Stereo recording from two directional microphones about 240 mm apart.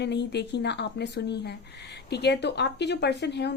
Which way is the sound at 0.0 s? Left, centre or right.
Left.